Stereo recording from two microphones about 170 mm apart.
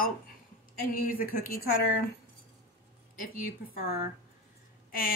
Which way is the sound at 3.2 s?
55° left (ahead or behind).